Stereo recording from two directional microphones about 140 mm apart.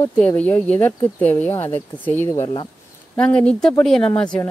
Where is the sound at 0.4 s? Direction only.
10° left (ahead or behind).